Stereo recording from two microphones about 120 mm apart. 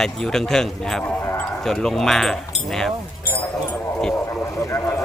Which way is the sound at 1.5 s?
5° left (ahead or behind).